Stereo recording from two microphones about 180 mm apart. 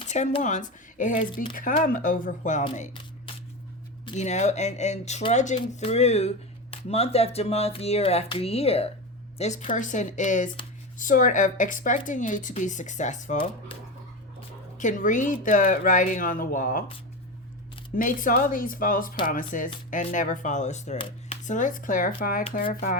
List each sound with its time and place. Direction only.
0.1 s speech: 40° left (ahead or behind)
3.3 s a sound: 30° left (ahead or behind)
4.0 s speech: 40° left (ahead or behind)
14.8 s speech: 45° left (ahead or behind)
17.9 s speech: 50° left (ahead or behind)